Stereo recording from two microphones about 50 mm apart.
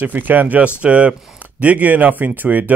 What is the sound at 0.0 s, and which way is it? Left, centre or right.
A man's voice, right.